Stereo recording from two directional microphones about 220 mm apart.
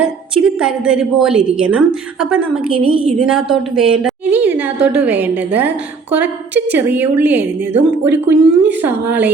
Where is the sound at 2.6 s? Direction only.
25° right (ahead or behind).